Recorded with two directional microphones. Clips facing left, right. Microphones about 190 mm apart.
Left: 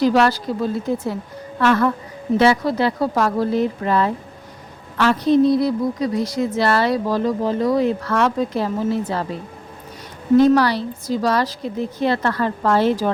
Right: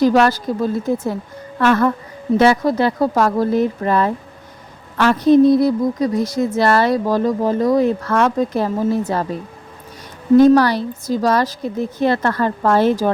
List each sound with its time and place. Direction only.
0.0 s a woman's voice: 45° right (ahead or behind)
10.3 s a woman's voice: 45° right (ahead or behind)